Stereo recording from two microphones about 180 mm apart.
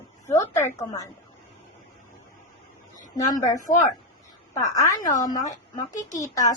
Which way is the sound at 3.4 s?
45° left (ahead or behind).